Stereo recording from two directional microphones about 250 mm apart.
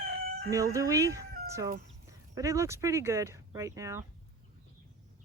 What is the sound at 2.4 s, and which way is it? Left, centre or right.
Speech, centre.